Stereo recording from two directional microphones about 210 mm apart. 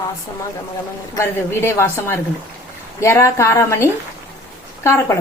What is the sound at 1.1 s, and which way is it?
Speech, 10° left (ahead or behind).